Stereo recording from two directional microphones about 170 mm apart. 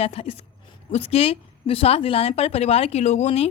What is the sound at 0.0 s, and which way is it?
A woman's voice, 35° left (ahead or behind).